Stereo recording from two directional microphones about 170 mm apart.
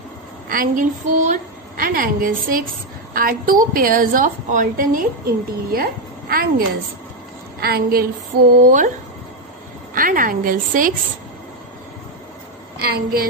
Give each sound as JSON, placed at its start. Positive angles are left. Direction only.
{"t": 0.5, "sound": "a woman's voice", "side_deg": -55}
{"t": 7.6, "sound": "a woman's voice", "side_deg": -65}
{"t": 8.5, "sound": "speech", "side_deg": -50}
{"t": 9.9, "sound": "a woman's voice", "side_deg": -55}
{"t": 12.7, "sound": "a woman's voice", "side_deg": -60}